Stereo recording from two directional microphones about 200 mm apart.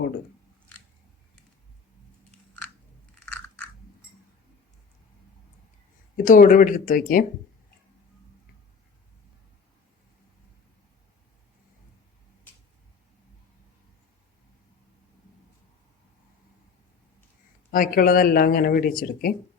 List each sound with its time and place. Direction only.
6.1 s speech: 40° left (ahead or behind)
17.7 s speech: 45° left (ahead or behind)